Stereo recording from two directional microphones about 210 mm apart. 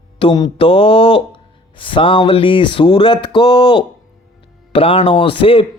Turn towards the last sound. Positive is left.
turn(degrees=25)  # may be behind; listen again after turning